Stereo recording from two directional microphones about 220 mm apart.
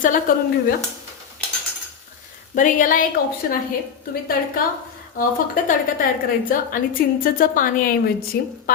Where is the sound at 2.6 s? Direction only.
35° left (ahead or behind).